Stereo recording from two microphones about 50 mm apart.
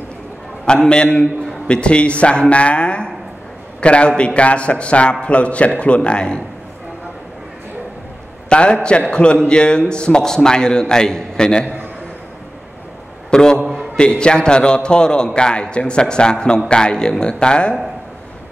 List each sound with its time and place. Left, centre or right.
0.8 s a man's voice: centre
8.5 s a man's voice: left
13.3 s a man's voice: centre